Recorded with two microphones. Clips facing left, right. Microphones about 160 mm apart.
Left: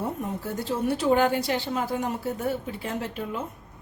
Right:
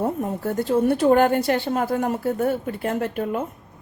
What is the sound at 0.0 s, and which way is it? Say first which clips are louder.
A woman's voice: right 6 dB; 55° right (ahead or behind).